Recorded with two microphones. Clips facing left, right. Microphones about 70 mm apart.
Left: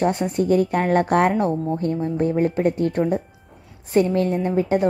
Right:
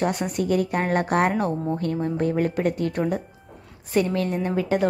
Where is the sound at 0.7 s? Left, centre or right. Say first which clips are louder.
Left 4 dB; right.